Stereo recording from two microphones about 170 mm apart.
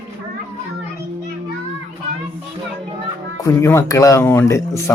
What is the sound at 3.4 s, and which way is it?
Speech, 15° left (ahead or behind).